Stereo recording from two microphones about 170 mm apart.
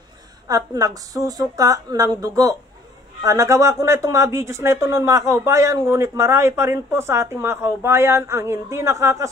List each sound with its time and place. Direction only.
0.5 s a woman's voice: 20° right (ahead or behind)